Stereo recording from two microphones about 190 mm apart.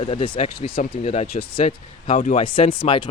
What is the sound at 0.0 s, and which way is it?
Speech, 30° left (ahead or behind).